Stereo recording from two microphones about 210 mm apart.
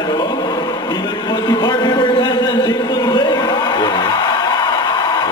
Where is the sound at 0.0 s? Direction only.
20° left (ahead or behind).